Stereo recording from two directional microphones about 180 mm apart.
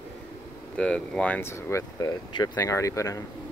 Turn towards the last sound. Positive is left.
turn(degrees=15)  # may be behind; listen again after turning